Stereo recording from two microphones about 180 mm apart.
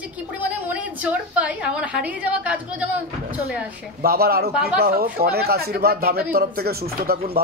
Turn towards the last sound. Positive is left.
turn(degrees=-60)  # may be behind; listen again after turning